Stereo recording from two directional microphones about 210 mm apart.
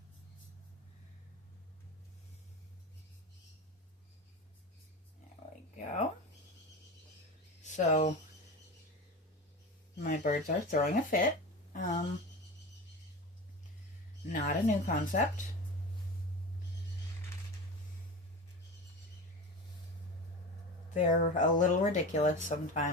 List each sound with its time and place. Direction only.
7.6 s speech: 35° left (ahead or behind)
10.0 s a woman's voice: 40° left (ahead or behind)
14.3 s speech: 35° left (ahead or behind)
20.9 s speech: 35° left (ahead or behind)